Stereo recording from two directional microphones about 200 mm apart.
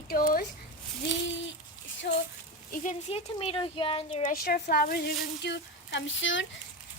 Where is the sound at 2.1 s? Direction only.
55° left (ahead or behind).